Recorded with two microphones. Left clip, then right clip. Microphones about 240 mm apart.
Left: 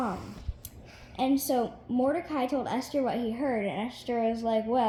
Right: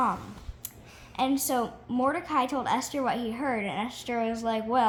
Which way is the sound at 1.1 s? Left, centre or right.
Centre.